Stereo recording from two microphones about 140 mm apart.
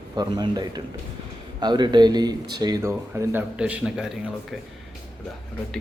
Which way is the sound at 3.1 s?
10° right (ahead or behind).